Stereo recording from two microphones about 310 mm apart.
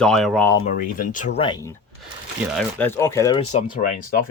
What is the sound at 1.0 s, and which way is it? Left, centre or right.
Speech, left.